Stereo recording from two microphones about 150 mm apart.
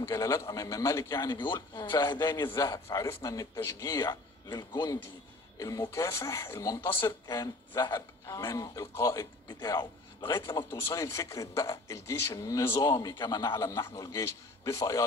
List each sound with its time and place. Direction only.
0.0 s speech: 20° left (ahead or behind)
1.4 s speech: 30° left (ahead or behind)